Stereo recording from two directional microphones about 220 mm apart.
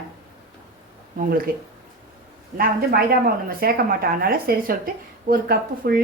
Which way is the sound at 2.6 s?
45° right (ahead or behind).